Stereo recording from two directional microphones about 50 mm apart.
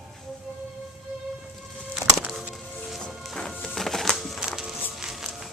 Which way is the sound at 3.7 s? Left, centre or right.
Centre.